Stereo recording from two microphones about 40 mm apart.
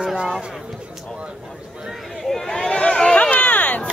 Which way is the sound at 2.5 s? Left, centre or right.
Left.